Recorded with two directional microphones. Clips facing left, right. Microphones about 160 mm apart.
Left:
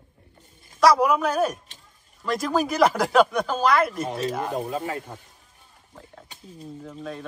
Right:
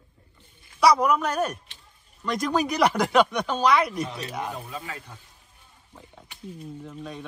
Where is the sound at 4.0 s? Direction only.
50° left (ahead or behind).